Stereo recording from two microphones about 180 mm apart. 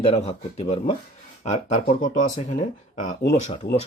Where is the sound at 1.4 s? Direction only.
40° left (ahead or behind).